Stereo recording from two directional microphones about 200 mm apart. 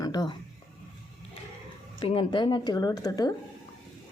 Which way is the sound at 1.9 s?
25° left (ahead or behind).